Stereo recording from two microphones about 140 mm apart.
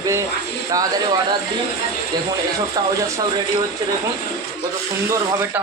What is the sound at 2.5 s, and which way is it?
Speech, 25° right (ahead or behind).